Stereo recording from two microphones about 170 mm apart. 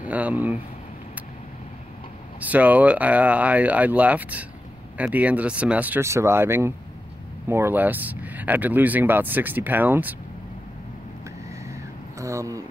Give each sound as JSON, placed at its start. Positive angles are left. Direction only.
{"t": 0.0, "sound": "speech", "side_deg": -10}
{"t": 2.4, "sound": "speech", "side_deg": -10}
{"t": 12.2, "sound": "a sound", "side_deg": -20}